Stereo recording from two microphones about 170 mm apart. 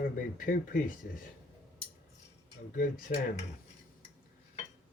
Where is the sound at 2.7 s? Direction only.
50° left (ahead or behind).